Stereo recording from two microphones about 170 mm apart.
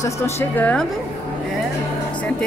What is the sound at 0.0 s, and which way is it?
Speech, 10° left (ahead or behind).